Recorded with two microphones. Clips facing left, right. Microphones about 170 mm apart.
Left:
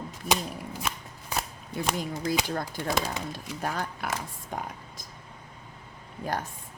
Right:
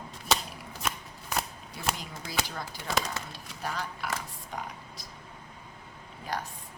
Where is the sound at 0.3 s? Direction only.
10° left (ahead or behind).